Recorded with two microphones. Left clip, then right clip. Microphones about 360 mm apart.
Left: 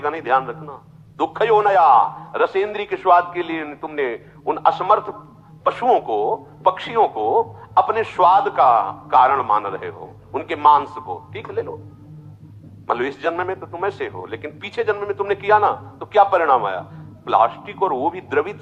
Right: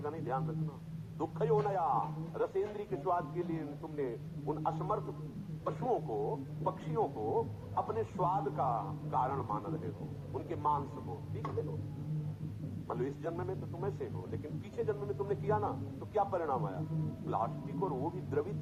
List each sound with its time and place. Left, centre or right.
0.0 s a man's voice: left
12.9 s a man's voice: left